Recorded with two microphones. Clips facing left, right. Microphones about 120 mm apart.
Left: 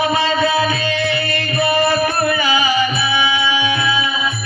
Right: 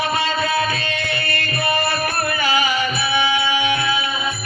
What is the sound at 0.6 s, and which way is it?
Music, 55° right (ahead or behind).